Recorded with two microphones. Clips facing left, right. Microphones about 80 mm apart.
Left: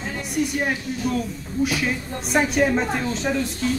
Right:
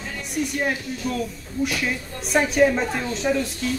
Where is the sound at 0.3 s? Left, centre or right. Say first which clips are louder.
Left 1 dB; centre.